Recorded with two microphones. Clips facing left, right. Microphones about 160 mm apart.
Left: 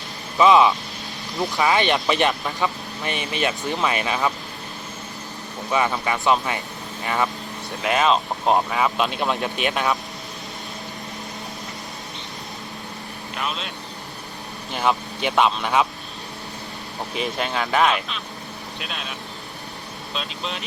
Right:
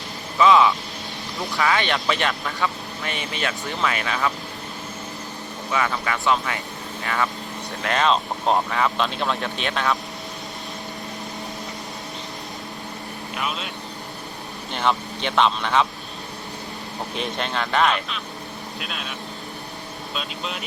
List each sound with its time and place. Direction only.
0.3 s speech: 20° left (ahead or behind)
5.7 s speech: 20° left (ahead or behind)
7.8 s speech: 10° left (ahead or behind)
13.3 s speech: 5° right (ahead or behind)
14.7 s speech: 10° left (ahead or behind)
17.2 s speech: 5° left (ahead or behind)
20.1 s speech: centre (ahead or behind)